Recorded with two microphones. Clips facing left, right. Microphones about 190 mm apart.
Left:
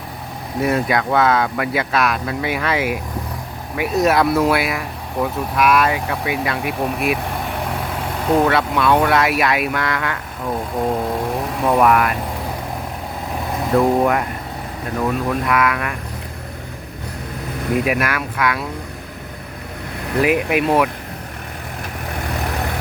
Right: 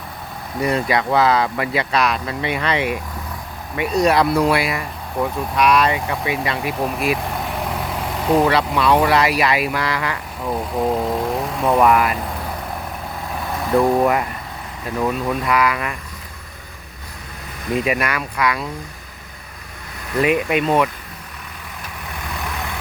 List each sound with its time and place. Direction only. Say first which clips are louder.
0.6 s speech: left 1 dB; centre (ahead or behind)
13.8 s speech: even; centre (ahead or behind)
15.3 s speech: even; centre (ahead or behind)
17.7 s speech: even; centre (ahead or behind)
20.2 s speech: left 1 dB; 5° left (ahead or behind)